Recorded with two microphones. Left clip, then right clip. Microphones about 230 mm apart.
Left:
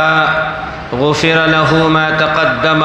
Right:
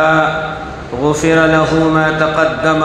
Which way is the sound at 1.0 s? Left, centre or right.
Left.